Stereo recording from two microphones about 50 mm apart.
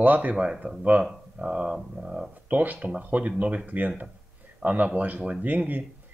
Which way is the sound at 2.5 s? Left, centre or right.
Right.